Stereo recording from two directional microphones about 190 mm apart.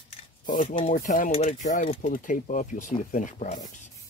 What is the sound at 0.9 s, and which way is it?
Speech, 45° left (ahead or behind).